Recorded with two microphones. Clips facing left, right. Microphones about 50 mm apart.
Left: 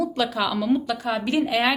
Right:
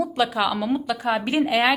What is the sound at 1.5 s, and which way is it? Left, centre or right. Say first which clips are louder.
Speech: right 4 dB; centre.